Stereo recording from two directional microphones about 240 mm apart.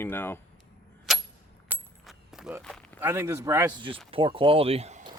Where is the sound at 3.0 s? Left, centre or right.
Centre; by 5.1 s right.